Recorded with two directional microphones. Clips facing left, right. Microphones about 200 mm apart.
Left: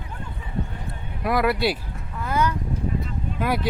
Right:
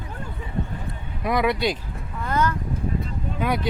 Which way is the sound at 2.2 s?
10° left (ahead or behind).